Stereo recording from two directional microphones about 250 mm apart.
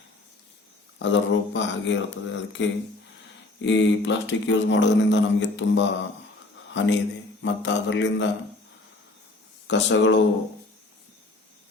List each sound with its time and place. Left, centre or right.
0.9 s speech: left
9.6 s speech: left